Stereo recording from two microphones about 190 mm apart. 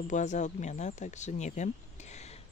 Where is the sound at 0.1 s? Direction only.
40° left (ahead or behind).